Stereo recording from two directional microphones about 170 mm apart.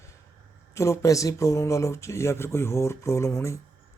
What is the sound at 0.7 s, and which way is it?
Speech, 15° left (ahead or behind).